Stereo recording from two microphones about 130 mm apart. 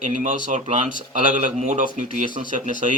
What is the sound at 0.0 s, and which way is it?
A man's voice, 70° right (ahead or behind).